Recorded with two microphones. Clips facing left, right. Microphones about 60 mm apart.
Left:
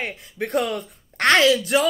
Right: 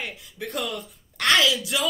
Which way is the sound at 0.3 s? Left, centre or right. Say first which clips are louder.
Left 8 dB; left.